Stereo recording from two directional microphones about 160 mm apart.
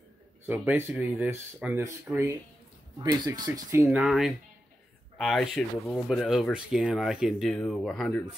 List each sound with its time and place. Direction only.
0.5 s speech: 15° right (ahead or behind)
3.0 s speech: 25° right (ahead or behind)
4.0 s speech: centre (ahead or behind)